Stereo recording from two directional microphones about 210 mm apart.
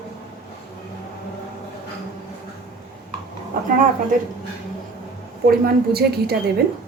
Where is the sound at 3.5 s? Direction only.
40° right (ahead or behind).